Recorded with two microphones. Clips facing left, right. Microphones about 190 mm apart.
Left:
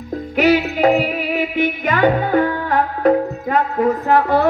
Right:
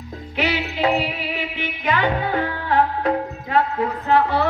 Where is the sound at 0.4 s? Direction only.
45° left (ahead or behind).